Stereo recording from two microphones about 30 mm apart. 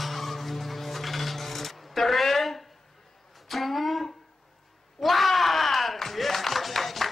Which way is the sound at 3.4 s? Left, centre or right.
Centre.